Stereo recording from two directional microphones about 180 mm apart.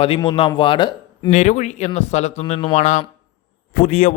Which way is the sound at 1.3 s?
40° left (ahead or behind).